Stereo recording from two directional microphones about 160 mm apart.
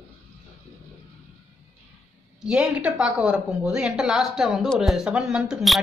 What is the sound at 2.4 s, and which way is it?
A woman's voice, 5° right (ahead or behind).